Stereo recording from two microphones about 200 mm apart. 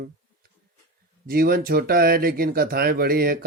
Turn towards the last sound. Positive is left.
turn(degrees=-50)  # may be behind; listen again after turning